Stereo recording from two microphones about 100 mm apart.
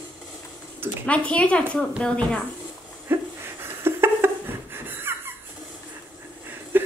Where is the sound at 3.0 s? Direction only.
25° right (ahead or behind).